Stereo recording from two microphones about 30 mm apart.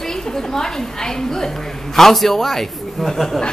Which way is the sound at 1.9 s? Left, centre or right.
Centre.